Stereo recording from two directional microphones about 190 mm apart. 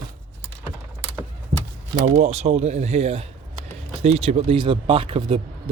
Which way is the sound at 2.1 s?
35° right (ahead or behind).